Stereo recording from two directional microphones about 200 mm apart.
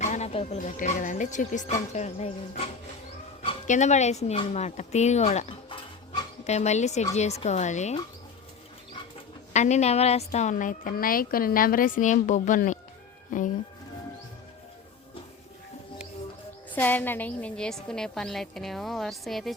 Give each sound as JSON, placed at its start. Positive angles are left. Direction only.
{"t": 0.0, "sound": "a woman's voice", "side_deg": 35}
{"t": 9.5, "sound": "a woman's voice", "side_deg": 35}
{"t": 16.7, "sound": "a woman's voice", "side_deg": 10}